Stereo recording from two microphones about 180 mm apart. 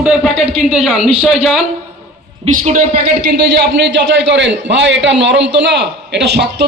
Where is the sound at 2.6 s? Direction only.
45° right (ahead or behind).